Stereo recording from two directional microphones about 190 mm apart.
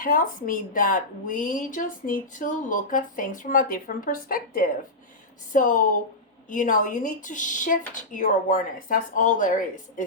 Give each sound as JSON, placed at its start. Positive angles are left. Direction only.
{"t": 0.0, "sound": "a woman's voice", "side_deg": 45}